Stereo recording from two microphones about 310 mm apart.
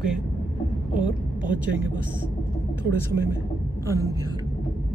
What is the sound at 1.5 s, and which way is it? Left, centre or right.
Speech, centre.